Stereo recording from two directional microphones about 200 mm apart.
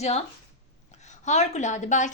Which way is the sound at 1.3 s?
35° left (ahead or behind).